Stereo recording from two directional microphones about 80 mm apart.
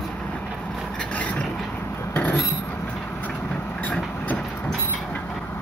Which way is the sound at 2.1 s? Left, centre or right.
Left.